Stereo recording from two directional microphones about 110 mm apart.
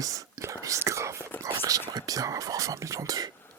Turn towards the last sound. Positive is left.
turn(degrees=-35)  # may be behind; listen again after turning